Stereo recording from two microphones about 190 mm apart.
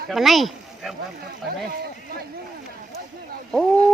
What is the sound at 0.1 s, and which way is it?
Speech, centre (ahead or behind).